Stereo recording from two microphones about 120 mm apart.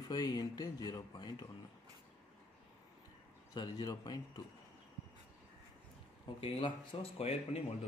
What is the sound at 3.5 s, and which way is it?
Speech, 30° left (ahead or behind).